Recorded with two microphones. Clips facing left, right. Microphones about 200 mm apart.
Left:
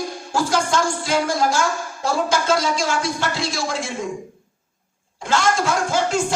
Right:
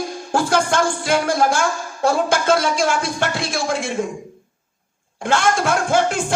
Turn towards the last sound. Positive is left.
turn(degrees=-55)  # may be behind; listen again after turning